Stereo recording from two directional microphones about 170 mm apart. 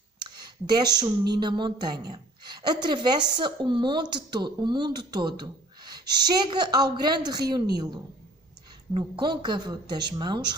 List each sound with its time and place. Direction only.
0.7 s a woman's voice: 25° right (ahead or behind)
8.9 s a woman's voice: 30° right (ahead or behind)